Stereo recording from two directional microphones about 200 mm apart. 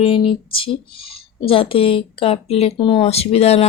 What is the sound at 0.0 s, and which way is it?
A woman's voice, 25° left (ahead or behind).